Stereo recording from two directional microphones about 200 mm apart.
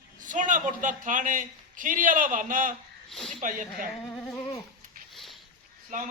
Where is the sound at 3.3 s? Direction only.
40° right (ahead or behind).